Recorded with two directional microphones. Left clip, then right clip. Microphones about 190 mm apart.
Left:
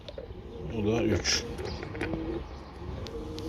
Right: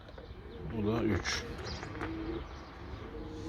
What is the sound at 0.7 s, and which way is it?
Speech, 10° right (ahead or behind).